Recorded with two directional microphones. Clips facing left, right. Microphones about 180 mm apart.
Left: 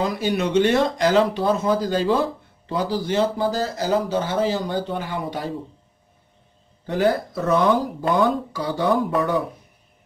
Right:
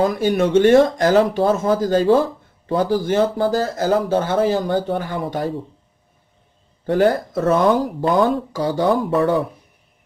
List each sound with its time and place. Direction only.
0.0 s speech: 50° right (ahead or behind)
6.9 s speech: 50° right (ahead or behind)